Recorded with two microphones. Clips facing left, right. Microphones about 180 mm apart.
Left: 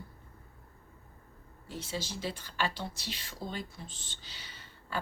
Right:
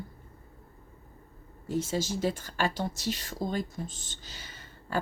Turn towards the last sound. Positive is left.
turn(degrees=-45)  # may be behind; listen again after turning